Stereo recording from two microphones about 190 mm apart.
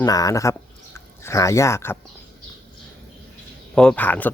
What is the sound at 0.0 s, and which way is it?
Speech, 20° left (ahead or behind).